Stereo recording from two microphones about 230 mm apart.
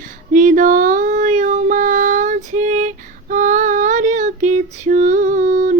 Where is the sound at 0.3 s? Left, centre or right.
Right.